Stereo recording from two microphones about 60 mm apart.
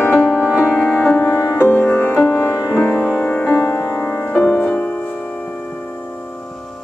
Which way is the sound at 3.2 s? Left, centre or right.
Left.